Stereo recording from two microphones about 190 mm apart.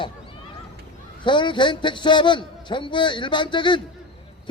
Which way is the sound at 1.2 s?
25° left (ahead or behind).